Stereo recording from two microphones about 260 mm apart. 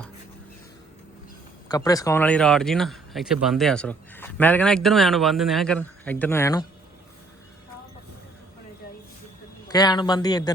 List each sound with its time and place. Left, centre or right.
1.6 s speech: centre
9.7 s speech: centre